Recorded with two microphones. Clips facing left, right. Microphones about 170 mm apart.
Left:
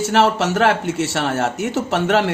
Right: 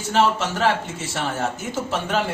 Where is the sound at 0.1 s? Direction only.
75° left (ahead or behind).